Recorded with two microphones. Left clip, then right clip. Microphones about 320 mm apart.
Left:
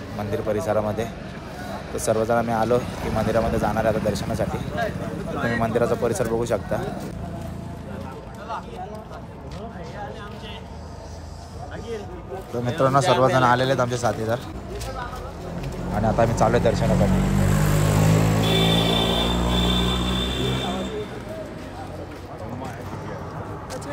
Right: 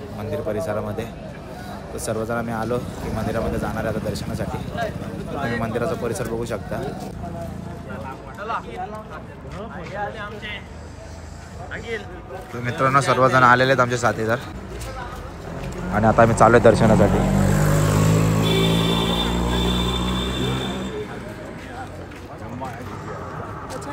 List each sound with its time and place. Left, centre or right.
0.3 s speech: centre
12.5 s speech: centre
16.0 s speech: centre
17.4 s vehicle: centre
17.7 s vehicle: centre